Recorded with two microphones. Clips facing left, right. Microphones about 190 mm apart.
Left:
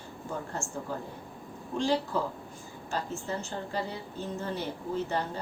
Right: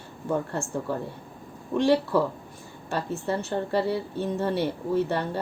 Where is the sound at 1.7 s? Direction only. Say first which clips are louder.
Right 7 dB; 65° right (ahead or behind).